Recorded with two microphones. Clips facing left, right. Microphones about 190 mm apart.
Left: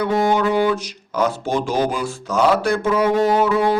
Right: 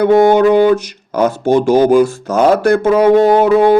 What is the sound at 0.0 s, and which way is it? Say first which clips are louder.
Speech: right 9 dB; 55° right (ahead or behind).